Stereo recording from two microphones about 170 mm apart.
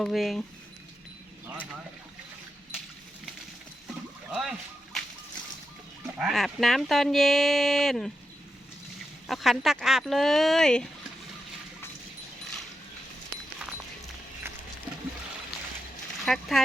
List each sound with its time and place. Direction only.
0.0 s speech: centre (ahead or behind)
4.3 s a sound: centre (ahead or behind)
6.1 s speech: centre (ahead or behind)
9.2 s speech: centre (ahead or behind)
16.2 s speech: centre (ahead or behind)